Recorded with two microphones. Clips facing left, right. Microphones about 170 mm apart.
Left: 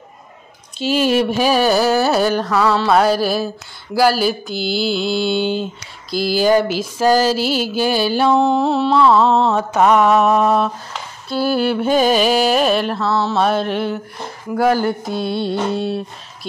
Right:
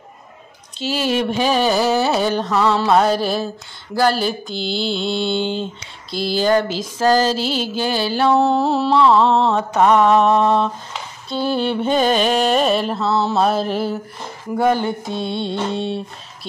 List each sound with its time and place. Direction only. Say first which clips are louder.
0.7 s mantra: left 4 dB; 15° left (ahead or behind)
3.9 s a sound: left 2 dB; 5° left (ahead or behind)
8.4 s mantra: left 1 dB; centre (ahead or behind)
9.0 s mantra: left 1 dB; 10° left (ahead or behind)
13.0 s mantra: even; 20° right (ahead or behind)
13.4 s mantra: left 1 dB; centre (ahead or behind)